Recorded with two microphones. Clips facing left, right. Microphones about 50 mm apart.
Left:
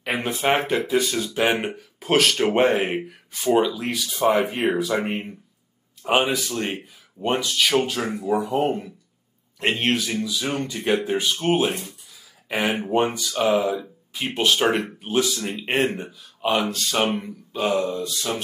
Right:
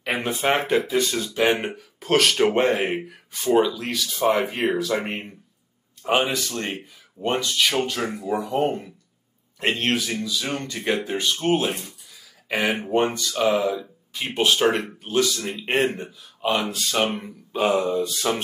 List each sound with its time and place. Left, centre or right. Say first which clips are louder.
0.0 s speech: even; centre
3.0 s speech: left 2 dB; centre
10.1 s speech: left 2 dB; centre
15.0 s speech: even; centre
17.5 s a sound: right 2 dB; centre
18.0 s mantra: right 3 dB; right